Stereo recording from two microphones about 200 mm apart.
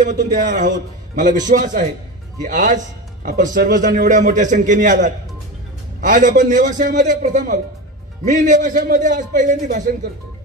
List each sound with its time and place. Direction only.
0.0 s a man's voice: 40° right (ahead or behind)